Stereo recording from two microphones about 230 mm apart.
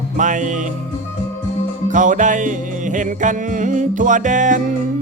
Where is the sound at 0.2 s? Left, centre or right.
Right.